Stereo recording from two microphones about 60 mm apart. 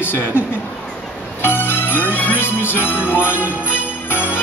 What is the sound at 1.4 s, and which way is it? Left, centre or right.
Music, left.